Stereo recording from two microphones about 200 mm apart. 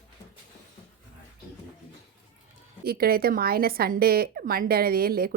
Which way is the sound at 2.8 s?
50° right (ahead or behind).